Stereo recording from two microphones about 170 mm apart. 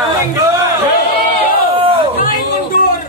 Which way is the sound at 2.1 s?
55° left (ahead or behind).